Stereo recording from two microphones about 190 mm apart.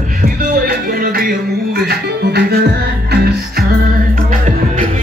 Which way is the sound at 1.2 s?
50° right (ahead or behind).